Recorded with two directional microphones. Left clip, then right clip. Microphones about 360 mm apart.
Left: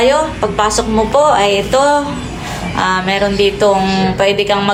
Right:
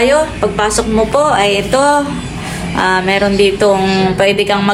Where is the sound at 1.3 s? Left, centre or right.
Left.